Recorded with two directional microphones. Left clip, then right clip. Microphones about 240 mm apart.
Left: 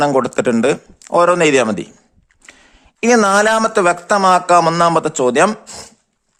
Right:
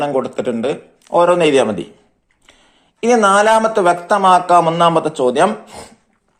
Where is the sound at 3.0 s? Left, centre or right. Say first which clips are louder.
Even; left.